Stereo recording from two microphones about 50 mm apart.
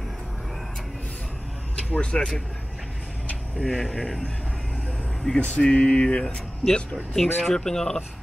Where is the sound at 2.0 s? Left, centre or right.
Left.